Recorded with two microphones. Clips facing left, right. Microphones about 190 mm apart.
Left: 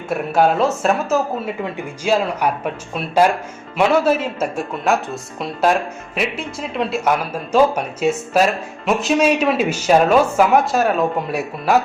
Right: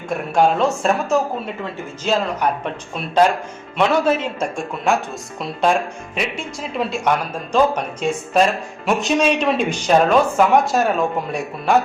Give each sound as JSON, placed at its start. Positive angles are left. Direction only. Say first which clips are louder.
{"t": 0.1, "sound": "speech", "louder": "left 1 dB", "side_deg": 5}
{"t": 1.6, "sound": "speech", "louder": "left 2 dB", "side_deg": 10}